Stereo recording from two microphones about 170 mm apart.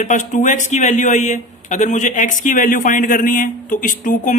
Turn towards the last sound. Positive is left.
turn(degrees=50)  # may be behind; listen again after turning